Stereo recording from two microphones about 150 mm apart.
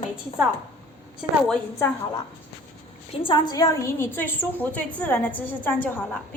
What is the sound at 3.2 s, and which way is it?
A woman's voice, 30° left (ahead or behind).